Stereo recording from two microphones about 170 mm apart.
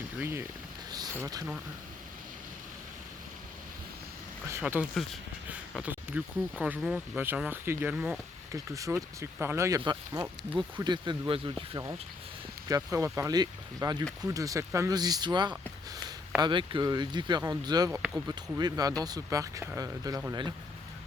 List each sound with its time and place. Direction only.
0.2 s speech: 15° right (ahead or behind)
0.9 s a sound: 20° right (ahead or behind)
4.6 s speech: 5° right (ahead or behind)
8.5 s speech: 20° right (ahead or behind)